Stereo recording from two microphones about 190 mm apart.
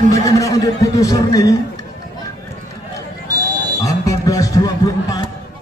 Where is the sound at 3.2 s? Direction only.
20° right (ahead or behind).